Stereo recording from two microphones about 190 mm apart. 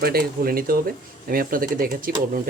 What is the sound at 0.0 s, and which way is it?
Speech, 55° right (ahead or behind).